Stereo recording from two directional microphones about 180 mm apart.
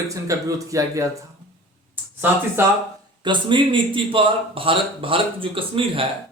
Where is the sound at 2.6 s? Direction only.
15° right (ahead or behind).